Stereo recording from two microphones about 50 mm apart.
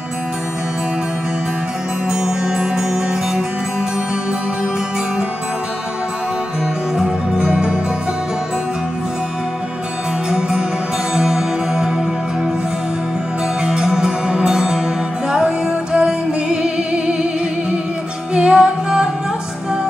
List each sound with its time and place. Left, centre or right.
2.0 s music: centre
7.0 s music: centre
11.1 s music: centre
13.6 s music: centre
18.3 s music: centre